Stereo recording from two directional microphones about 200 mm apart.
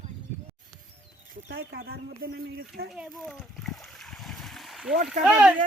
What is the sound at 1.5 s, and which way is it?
Speech, 50° right (ahead or behind).